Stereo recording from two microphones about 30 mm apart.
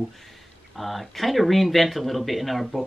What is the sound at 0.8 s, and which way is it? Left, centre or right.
A woman's voice, centre.